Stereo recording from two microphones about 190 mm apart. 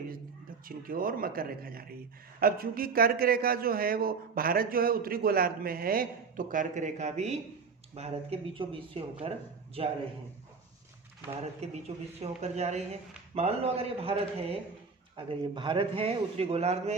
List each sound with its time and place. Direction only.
0.6 s a man's voice: 50° right (ahead or behind); by 9.9 s 30° right (ahead or behind)
12.2 s a man's voice: 35° right (ahead or behind)